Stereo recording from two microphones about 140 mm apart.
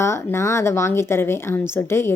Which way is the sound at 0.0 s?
20° left (ahead or behind).